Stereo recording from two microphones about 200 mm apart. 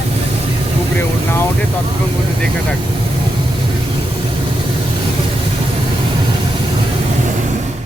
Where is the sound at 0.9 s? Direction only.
10° left (ahead or behind).